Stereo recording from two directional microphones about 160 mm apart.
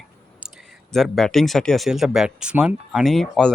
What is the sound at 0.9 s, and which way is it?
Speech, centre (ahead or behind).